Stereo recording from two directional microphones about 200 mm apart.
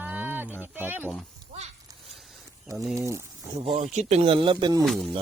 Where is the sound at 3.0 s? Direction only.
15° right (ahead or behind).